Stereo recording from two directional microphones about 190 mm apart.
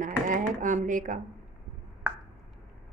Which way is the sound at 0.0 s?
45° right (ahead or behind).